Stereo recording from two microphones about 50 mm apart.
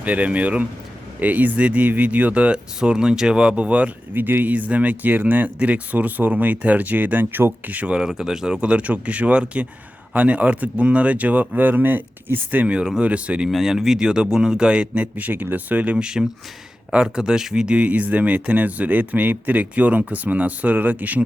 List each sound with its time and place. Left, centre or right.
0.0 s speech: right
4.1 s speech: right
7.8 s speech: right
8.0 s speech: centre; by 12.7 s right
12.7 s speech: centre
13.0 s speech: right
13.5 s speech: centre; by 15.1 s right
15.1 s speech: right
16.9 s speech: centre; by 21.2 s right